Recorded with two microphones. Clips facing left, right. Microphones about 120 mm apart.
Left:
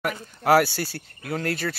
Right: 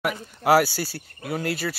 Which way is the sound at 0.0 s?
5° right (ahead or behind).